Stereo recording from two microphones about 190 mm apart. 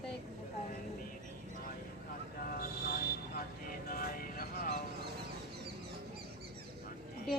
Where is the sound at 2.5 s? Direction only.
50° left (ahead or behind).